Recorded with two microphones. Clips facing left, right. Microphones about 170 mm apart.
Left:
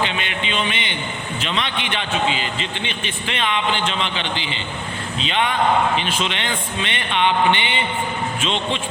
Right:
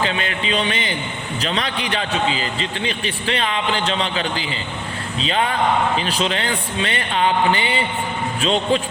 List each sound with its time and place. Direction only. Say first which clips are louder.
0.0 s a man's voice: right 2 dB; 35° right (ahead or behind)